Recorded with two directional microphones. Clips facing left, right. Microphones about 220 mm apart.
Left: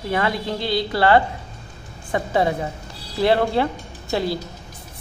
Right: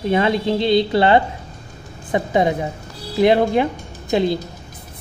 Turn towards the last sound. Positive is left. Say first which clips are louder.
# right 5 dB
turn(degrees=-20)  # may be behind; listen again after turning